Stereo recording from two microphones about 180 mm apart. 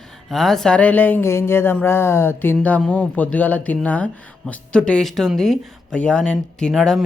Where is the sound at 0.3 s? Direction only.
Centre (ahead or behind).